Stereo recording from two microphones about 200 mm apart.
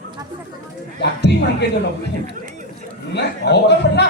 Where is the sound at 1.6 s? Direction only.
55° left (ahead or behind).